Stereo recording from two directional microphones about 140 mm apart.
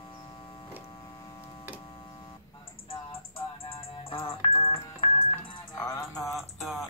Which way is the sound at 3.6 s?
40° left (ahead or behind).